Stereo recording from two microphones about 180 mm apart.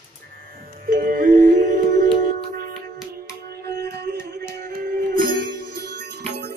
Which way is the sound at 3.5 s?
65° right (ahead or behind).